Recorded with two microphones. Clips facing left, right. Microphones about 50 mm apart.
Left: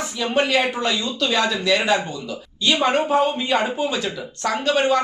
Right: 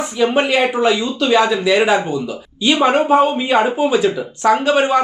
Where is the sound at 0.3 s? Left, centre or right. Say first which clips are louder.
Right 1 dB; centre.